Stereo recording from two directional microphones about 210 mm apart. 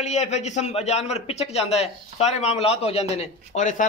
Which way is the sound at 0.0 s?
35° left (ahead or behind).